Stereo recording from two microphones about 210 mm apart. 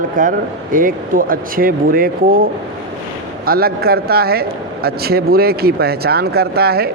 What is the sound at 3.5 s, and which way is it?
Speech, 45° right (ahead or behind).